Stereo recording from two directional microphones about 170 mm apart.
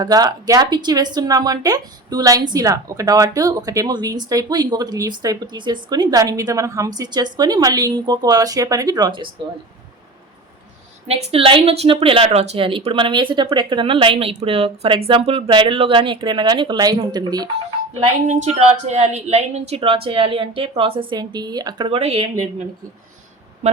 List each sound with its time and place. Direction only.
0.0 s speech: 20° right (ahead or behind)
11.1 s a woman's voice: 35° right (ahead or behind)
17.9 s a woman's voice: 45° right (ahead or behind)